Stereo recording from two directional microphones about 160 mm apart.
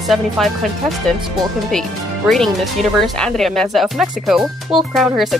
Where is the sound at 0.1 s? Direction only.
Centre (ahead or behind).